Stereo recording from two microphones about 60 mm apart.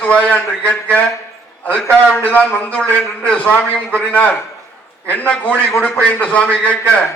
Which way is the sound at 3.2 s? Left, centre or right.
Centre.